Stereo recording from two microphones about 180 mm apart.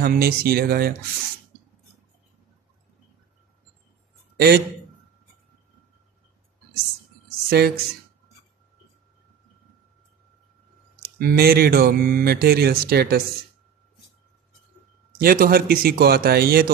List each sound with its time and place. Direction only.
0.0 s speech: 55° right (ahead or behind)
7.2 s a sound: 60° right (ahead or behind)
11.1 s speech: 60° right (ahead or behind)
15.1 s speech: 55° right (ahead or behind)